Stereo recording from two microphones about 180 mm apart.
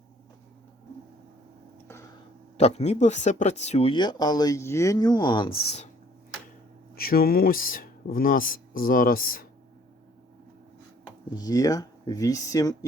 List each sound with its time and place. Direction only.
2.6 s speech: 35° left (ahead or behind)
6.9 s speech: 55° left (ahead or behind)
11.3 s speech: 20° left (ahead or behind)